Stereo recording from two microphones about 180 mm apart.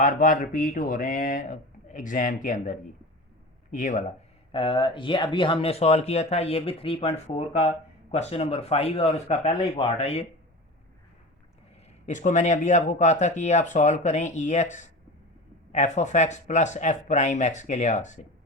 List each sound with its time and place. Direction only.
0.0 s speech: 45° left (ahead or behind)
4.5 s speech: 30° left (ahead or behind)
12.0 s speech: 40° left (ahead or behind)